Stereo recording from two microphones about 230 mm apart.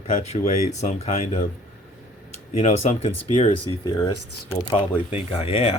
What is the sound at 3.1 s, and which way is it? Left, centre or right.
Speech, left.